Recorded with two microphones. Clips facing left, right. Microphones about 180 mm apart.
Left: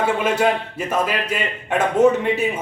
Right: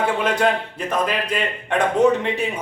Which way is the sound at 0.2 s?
5° left (ahead or behind).